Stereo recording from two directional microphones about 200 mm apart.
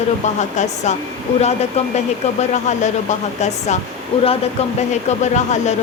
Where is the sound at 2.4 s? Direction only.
35° left (ahead or behind).